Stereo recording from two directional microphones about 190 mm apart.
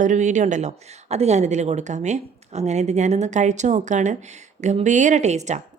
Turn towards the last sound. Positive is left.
turn(degrees=-35)  # may be behind; listen again after turning